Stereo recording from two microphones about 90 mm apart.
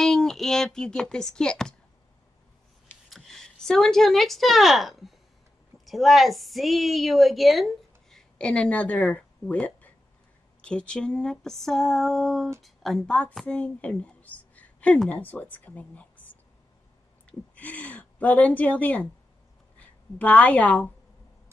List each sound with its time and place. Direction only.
0.0 s speech: 5° left (ahead or behind)
3.1 s a woman's voice: centre (ahead or behind)
10.6 s a sound: 10° left (ahead or behind)
13.6 s a woman's voice: 15° left (ahead or behind)